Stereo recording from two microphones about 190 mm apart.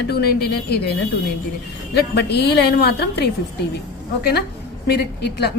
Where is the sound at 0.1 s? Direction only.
55° left (ahead or behind).